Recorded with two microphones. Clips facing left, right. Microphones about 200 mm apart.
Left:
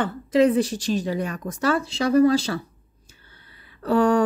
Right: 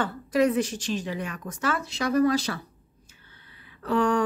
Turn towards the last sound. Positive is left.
turn(degrees=40)  # may be behind; listen again after turning